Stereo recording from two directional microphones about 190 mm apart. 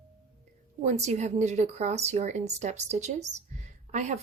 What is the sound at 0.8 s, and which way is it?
A woman's voice, 35° right (ahead or behind).